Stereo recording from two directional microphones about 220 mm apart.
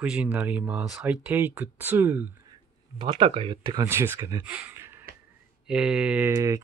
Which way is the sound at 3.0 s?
25° right (ahead or behind).